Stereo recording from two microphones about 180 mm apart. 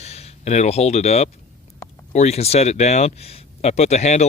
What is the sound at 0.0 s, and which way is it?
Speech, 35° left (ahead or behind).